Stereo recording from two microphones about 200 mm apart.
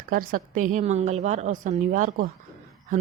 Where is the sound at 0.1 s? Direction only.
45° right (ahead or behind).